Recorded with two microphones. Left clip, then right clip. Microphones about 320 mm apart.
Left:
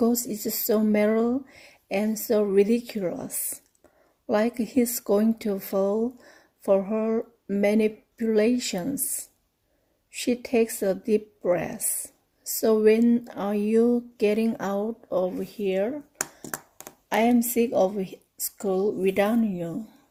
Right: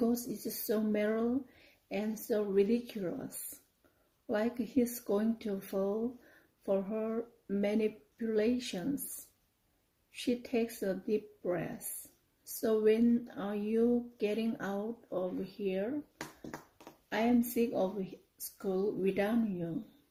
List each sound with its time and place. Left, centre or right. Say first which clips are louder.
0.3 s speech: left 10 dB; left
10.1 s speech: left 9 dB; left